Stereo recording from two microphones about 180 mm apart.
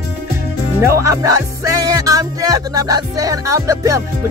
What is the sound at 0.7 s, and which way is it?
Music, 15° right (ahead or behind).